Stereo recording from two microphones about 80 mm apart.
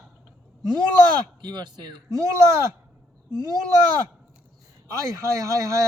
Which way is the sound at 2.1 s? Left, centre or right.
Right.